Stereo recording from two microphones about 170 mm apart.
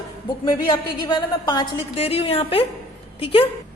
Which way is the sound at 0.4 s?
25° left (ahead or behind).